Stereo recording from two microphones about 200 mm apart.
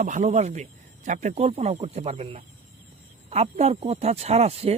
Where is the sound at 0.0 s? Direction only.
35° right (ahead or behind).